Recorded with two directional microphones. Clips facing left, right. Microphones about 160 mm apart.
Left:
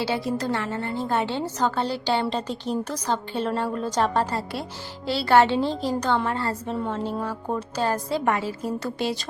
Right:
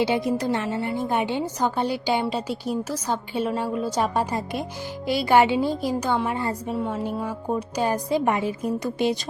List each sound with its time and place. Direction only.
0.0 s a woman's voice: 20° right (ahead or behind)